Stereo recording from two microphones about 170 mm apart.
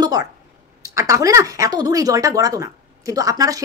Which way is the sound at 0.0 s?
20° right (ahead or behind).